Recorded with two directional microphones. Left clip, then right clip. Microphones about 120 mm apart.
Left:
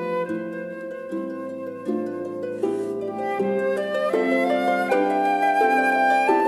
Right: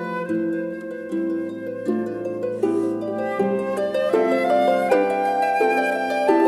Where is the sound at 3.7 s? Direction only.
40° left (ahead or behind).